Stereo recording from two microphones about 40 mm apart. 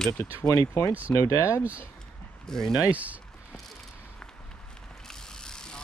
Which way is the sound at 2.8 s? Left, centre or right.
Right.